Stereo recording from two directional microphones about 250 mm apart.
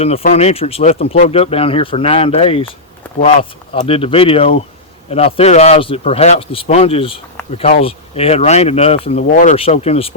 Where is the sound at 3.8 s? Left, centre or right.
Left.